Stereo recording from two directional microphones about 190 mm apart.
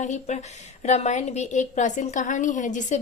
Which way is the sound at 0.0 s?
35° left (ahead or behind).